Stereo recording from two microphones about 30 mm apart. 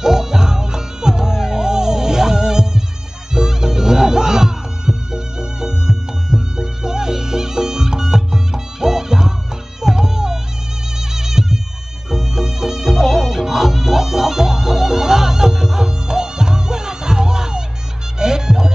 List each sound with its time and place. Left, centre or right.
0.0 s music: centre